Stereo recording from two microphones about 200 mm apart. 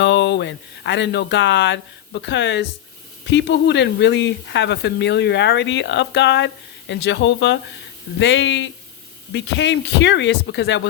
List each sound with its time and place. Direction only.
0.0 s speech: 60° left (ahead or behind)